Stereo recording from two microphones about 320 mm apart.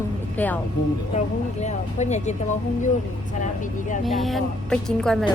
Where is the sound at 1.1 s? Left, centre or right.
Left.